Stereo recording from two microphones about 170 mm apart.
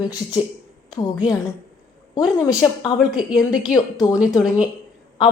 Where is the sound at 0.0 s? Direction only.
25° left (ahead or behind).